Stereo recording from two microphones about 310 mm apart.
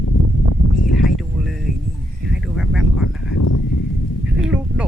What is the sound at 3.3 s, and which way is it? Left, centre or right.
Horse, left.